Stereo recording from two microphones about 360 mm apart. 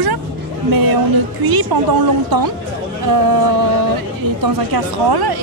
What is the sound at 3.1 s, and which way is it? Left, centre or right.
A woman's voice, right.